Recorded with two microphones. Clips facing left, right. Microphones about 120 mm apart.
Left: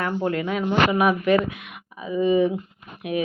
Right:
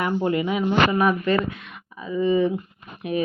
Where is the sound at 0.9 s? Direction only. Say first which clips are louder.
Left 1 dB; 10° left (ahead or behind).